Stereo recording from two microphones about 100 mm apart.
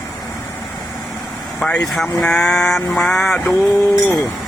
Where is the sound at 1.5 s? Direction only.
10° left (ahead or behind).